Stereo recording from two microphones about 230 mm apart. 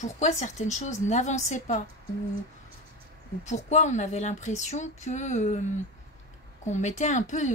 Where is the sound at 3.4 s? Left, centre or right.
Left.